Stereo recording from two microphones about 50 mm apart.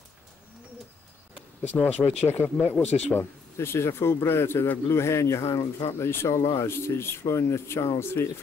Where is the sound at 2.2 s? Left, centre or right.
Left.